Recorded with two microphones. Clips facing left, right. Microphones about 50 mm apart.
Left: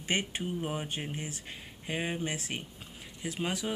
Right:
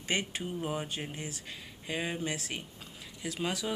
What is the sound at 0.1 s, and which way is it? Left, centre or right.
Speech, centre.